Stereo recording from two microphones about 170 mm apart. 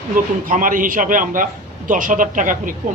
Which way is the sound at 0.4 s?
50° right (ahead or behind).